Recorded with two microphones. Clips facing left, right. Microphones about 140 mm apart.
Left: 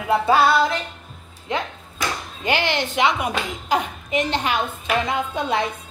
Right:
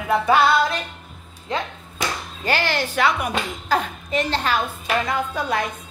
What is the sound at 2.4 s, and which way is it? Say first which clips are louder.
Speech: left 1 dB; 20° left (ahead or behind).